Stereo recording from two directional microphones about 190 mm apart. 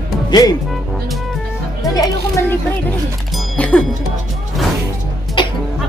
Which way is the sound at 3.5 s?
5° left (ahead or behind).